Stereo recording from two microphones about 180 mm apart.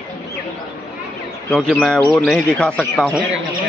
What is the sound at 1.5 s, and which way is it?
A man's voice, centre (ahead or behind).